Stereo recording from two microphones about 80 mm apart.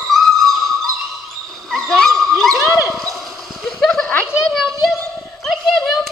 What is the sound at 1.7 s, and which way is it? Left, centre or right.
Dog, centre.